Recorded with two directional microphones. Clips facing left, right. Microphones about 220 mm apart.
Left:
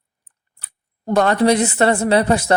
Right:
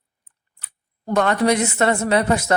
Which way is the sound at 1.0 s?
35° left (ahead or behind).